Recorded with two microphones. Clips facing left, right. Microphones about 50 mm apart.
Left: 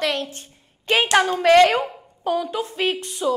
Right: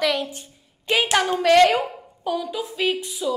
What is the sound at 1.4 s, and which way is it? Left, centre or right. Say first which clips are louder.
A woman's voice: even; centre.